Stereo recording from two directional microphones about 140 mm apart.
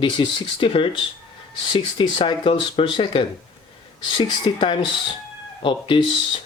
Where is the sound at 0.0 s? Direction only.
35° left (ahead or behind).